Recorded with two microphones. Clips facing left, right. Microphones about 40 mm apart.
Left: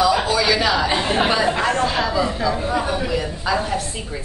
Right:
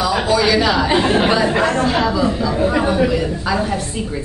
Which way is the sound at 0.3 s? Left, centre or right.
Centre.